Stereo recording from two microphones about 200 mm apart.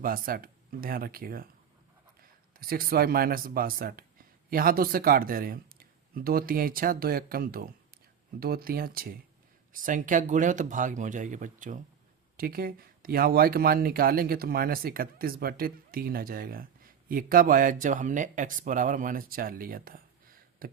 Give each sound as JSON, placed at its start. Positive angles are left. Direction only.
{"t": 0.0, "sound": "speech", "side_deg": -45}
{"t": 2.6, "sound": "speech", "side_deg": -45}